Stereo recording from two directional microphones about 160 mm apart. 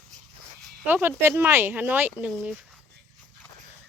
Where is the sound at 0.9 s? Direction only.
15° right (ahead or behind).